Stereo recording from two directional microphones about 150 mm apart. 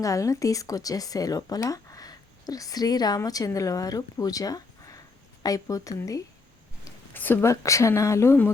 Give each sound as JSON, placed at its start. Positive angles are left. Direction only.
{"t": 0.0, "sound": "speech", "side_deg": 20}